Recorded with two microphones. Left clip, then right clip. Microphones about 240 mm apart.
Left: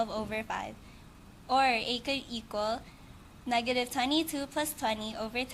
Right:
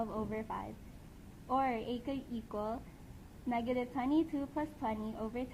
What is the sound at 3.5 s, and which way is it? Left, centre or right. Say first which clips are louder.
A woman's voice: left 6 dB; centre.